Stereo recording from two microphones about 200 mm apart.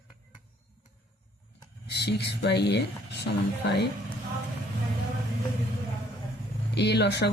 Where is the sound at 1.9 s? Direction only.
60° left (ahead or behind).